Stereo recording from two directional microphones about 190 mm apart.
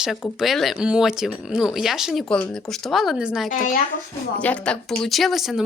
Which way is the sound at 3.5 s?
45° left (ahead or behind).